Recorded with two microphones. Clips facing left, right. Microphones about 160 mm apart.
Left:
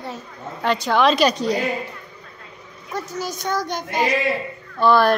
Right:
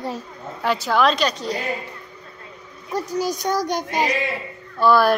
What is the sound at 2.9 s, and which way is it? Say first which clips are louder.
Child singing: right 4 dB; 35° right (ahead or behind).